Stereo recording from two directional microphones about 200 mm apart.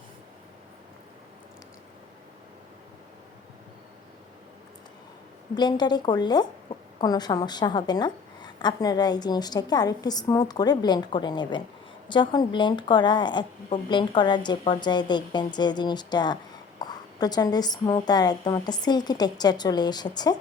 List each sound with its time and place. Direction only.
5.5 s a woman's voice: 20° left (ahead or behind)